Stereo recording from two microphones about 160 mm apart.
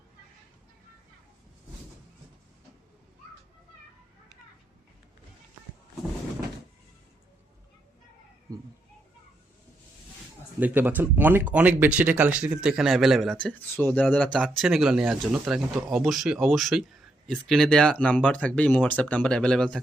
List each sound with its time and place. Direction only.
8.5 s a sound: 20° right (ahead or behind)
10.6 s speech: 10° right (ahead or behind)
13.5 s speech: 10° left (ahead or behind)